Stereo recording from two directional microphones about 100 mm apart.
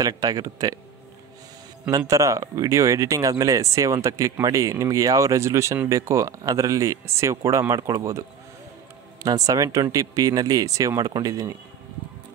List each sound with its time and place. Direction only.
0.0 s speech: 40° right (ahead or behind)
1.9 s speech: 35° right (ahead or behind)